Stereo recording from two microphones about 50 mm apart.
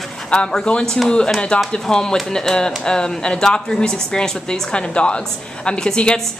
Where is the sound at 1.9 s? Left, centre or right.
Centre.